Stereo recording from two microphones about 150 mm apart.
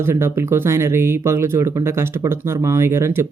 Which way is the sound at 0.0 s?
15° right (ahead or behind).